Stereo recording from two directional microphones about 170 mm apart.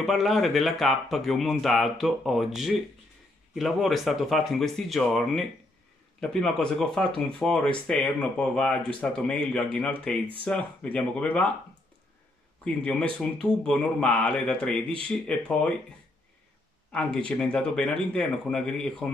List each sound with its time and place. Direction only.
0.0 s speech: centre (ahead or behind)
12.6 s speech: 5° left (ahead or behind)
16.9 s speech: 5° left (ahead or behind)